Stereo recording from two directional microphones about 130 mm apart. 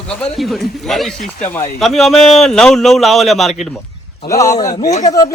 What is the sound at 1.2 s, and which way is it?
Speech, 85° left.